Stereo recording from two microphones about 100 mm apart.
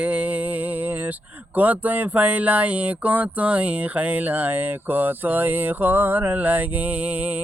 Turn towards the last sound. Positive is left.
turn(degrees=-20)  # may be behind; listen again after turning